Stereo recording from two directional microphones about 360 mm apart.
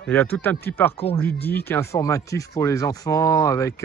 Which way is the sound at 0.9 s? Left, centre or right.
Centre.